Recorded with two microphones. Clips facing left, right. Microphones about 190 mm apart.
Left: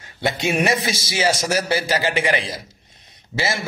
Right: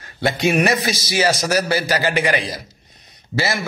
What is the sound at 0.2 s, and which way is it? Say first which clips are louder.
A man's voice: right 3 dB; 25° left (ahead or behind).